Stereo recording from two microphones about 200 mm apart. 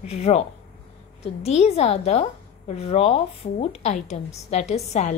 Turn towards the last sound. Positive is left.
turn(degrees=35)  # may be behind; listen again after turning